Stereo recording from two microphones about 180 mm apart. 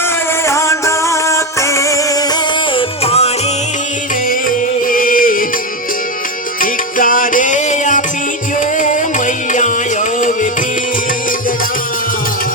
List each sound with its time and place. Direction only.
0.4 s music: 15° left (ahead or behind)
2.7 s music: 35° left (ahead or behind)
4.3 s music: 50° left (ahead or behind)
6.6 s music: 50° left (ahead or behind)